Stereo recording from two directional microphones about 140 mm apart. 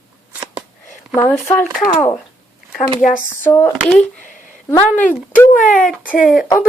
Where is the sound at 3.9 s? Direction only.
5° left (ahead or behind).